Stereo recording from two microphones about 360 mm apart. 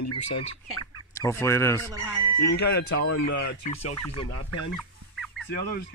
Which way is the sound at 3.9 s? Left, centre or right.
Centre.